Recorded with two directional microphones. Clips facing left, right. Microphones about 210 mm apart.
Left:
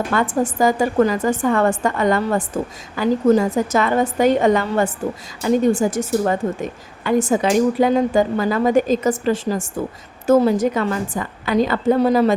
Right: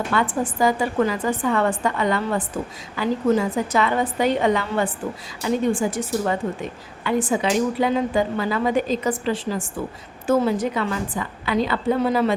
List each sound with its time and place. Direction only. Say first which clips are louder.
0.1 s a woman's voice: left 3 dB; 45° left (ahead or behind)